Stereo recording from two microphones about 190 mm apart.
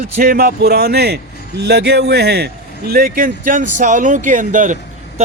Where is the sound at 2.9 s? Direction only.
50° right (ahead or behind).